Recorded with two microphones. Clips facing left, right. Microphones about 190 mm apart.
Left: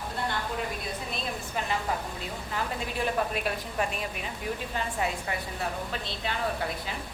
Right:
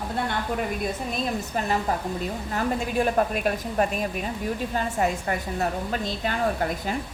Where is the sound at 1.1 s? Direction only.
45° right (ahead or behind).